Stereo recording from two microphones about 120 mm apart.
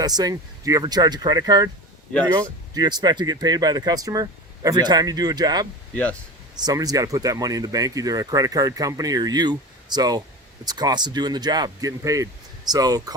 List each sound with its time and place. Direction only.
0.0 s speech: 35° right (ahead or behind)
5.9 s speech: 10° left (ahead or behind)
6.6 s speech: 30° right (ahead or behind)